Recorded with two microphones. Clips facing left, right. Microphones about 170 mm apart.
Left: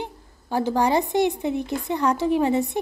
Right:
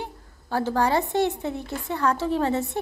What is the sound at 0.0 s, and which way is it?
A woman's voice, 15° left (ahead or behind).